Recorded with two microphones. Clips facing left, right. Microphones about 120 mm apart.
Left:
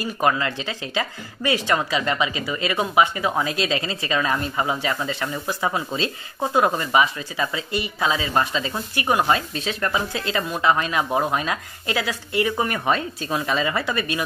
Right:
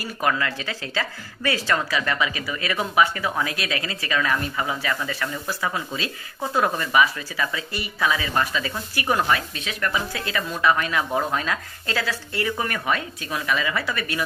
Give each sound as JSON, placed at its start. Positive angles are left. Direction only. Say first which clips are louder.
{"t": 0.0, "sound": "speech", "louder": "left 3 dB", "side_deg": 25}